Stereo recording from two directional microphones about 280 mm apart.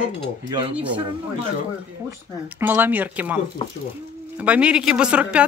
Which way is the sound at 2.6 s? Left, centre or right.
Centre.